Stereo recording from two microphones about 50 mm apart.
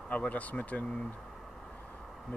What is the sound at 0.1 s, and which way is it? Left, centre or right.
Speech, left.